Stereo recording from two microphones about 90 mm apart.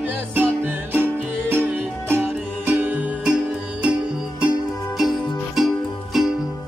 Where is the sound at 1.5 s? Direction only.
25° right (ahead or behind).